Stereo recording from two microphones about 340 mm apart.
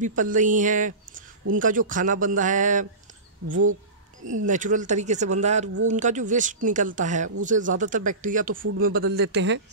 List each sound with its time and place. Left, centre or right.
0.0 s speech: right
3.4 s speech: right
4.2 s speech: right
4.5 s speech: right